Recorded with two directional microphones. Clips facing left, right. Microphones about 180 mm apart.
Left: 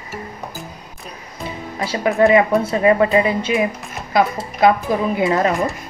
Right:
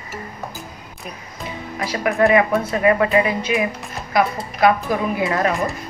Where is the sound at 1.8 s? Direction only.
20° left (ahead or behind).